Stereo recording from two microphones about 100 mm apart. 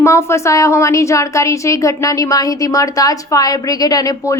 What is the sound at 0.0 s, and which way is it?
A woman's voice, 25° left (ahead or behind).